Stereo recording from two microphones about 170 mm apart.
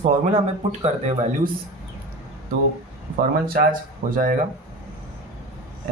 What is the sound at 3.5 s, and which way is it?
Speech, 55° right (ahead or behind).